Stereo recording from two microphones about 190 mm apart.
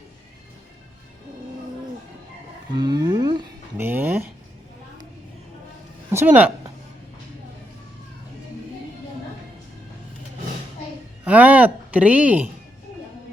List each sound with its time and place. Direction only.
2.6 s speech: 20° right (ahead or behind)
3.8 s speech: 10° right (ahead or behind)
6.1 s speech: 10° right (ahead or behind)
11.3 s speech: 10° right (ahead or behind)